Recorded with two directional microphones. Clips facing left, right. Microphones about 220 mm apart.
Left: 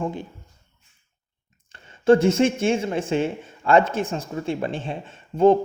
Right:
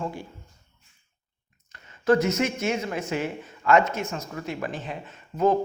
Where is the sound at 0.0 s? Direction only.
20° left (ahead or behind).